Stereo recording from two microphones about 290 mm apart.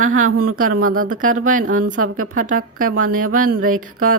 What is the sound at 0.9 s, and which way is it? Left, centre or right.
Speech, right.